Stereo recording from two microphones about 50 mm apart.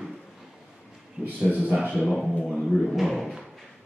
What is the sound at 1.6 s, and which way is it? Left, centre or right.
Speech, centre.